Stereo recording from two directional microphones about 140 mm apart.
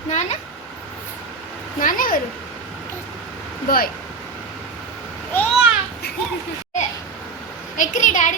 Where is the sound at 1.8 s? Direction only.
85° left.